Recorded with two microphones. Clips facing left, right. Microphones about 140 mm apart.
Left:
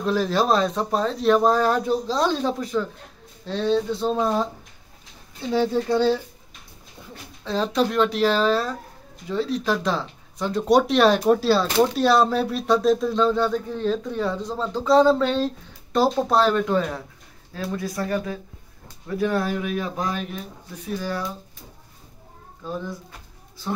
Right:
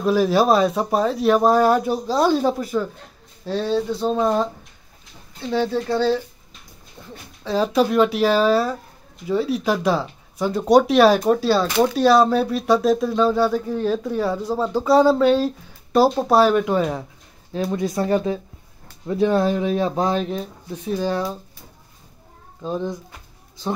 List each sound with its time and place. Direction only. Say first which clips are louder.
0.0 s speech: right 4 dB; 10° right (ahead or behind)
5.5 s speech: even; 15° left (ahead or behind)
7.0 s dog: right 2 dB; 10° left (ahead or behind)
7.4 s speech: right 4 dB; 5° right (ahead or behind); by 21.3 s 25° right (ahead or behind)
22.6 s speech: right 5 dB; 25° right (ahead or behind)